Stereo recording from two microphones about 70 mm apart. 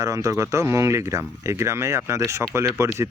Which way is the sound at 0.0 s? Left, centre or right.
Right.